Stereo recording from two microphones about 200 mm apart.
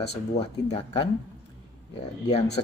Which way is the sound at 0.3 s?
25° left (ahead or behind).